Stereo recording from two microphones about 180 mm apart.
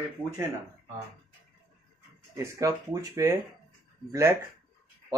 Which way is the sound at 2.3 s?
15° right (ahead or behind).